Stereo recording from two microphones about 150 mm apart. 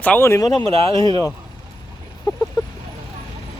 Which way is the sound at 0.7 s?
40° right (ahead or behind).